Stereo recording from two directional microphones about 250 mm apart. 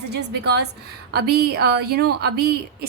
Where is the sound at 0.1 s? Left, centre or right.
Right.